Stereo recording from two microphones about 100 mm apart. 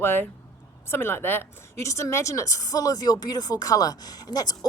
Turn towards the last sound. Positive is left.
turn(degrees=40)  # may be behind; listen again after turning